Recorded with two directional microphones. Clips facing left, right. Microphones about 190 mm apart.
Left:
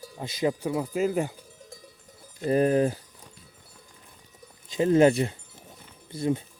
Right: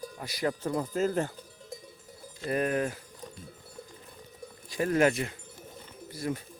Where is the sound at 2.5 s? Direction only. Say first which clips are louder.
Left 7 dB; 30° left (ahead or behind).